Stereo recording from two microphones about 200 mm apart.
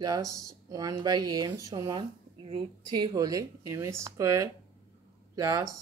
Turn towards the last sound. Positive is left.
turn(degrees=-15)  # may be behind; listen again after turning